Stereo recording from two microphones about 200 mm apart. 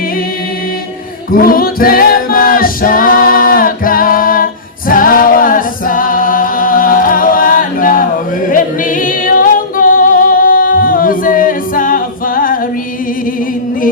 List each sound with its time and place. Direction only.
1.3 s music: 45° left (ahead or behind)
8.5 s singing: 45° left (ahead or behind)